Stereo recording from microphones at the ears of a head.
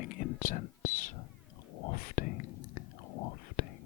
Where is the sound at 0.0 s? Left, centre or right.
Left.